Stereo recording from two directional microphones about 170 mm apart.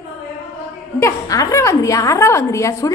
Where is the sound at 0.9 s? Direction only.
20° left (ahead or behind).